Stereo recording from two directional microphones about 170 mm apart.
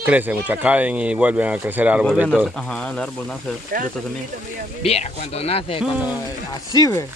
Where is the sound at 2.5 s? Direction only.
5° left (ahead or behind).